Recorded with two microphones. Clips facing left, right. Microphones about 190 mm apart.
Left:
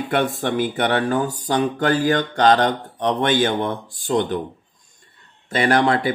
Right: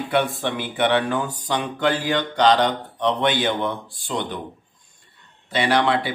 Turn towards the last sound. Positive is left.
turn(degrees=45)  # may be behind; listen again after turning